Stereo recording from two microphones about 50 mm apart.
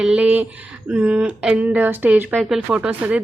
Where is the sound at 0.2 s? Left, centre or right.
Right.